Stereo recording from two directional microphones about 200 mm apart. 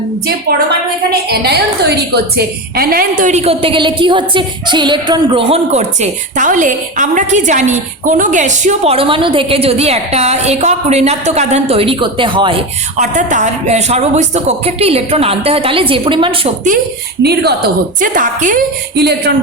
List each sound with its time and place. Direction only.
1.3 s a woman's voice: 55° right (ahead or behind); by 12.5 s 25° right (ahead or behind)
13.0 s a woman's voice: 40° right (ahead or behind)
18.0 s a woman's voice: 40° right (ahead or behind)
18.9 s speech: 55° right (ahead or behind)